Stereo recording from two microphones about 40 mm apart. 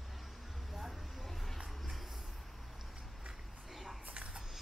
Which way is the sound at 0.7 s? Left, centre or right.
Centre.